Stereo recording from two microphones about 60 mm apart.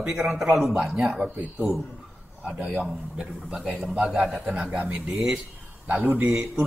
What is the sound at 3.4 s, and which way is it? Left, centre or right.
A man's voice, centre.